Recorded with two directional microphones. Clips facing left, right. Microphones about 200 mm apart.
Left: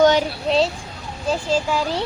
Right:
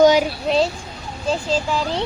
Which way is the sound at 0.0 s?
10° right (ahead or behind).